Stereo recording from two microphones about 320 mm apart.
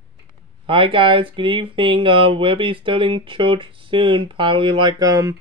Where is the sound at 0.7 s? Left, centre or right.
Centre.